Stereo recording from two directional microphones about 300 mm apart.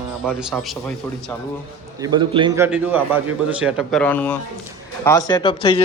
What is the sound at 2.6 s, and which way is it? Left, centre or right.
Speech, centre.